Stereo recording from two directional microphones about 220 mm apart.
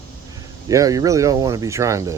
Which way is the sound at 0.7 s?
15° right (ahead or behind).